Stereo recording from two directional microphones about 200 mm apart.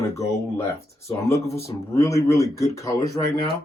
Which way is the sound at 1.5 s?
30° left (ahead or behind).